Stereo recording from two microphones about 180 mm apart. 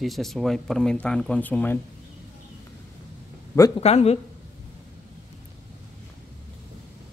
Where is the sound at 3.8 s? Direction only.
35° left (ahead or behind).